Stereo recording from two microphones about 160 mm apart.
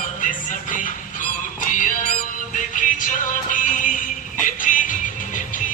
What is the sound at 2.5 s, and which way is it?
Music, 55° left (ahead or behind).